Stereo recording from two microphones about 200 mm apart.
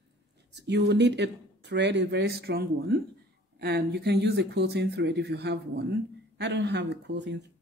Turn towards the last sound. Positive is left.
turn(degrees=-60)  # may be behind; listen again after turning